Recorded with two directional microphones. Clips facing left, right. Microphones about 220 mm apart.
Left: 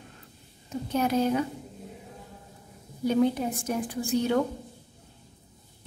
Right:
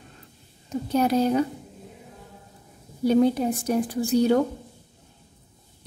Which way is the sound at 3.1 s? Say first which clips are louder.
Right 4 dB; 35° right (ahead or behind).